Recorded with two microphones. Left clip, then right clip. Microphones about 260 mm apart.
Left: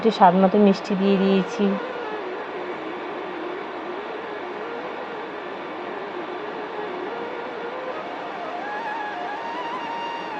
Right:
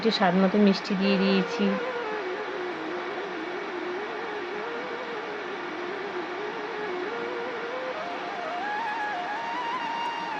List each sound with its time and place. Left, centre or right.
0.0 s speech: centre